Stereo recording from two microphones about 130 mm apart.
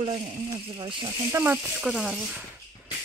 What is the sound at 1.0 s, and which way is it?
Speech, 25° right (ahead or behind).